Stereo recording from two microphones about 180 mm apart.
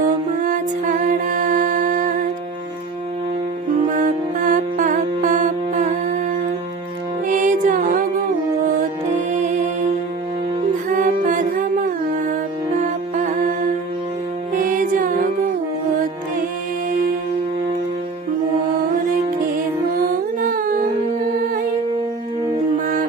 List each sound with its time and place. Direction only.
0.0 s music: 45° right (ahead or behind)
3.8 s music: 45° right (ahead or behind)
7.3 s music: 45° right (ahead or behind)
9.3 s music: 40° right (ahead or behind)
10.8 s music: 45° right (ahead or behind)
14.5 s music: 45° right (ahead or behind)
20.4 s a sound: 50° right (ahead or behind)